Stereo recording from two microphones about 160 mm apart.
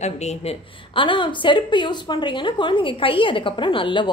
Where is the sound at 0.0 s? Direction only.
45° left (ahead or behind).